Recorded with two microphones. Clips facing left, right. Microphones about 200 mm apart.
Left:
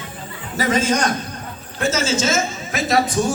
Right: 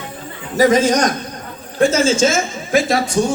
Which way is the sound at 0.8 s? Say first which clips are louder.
Right 4 dB; 40° right (ahead or behind).